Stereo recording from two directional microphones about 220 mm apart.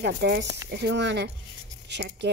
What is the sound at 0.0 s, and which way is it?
Speech, 50° right (ahead or behind).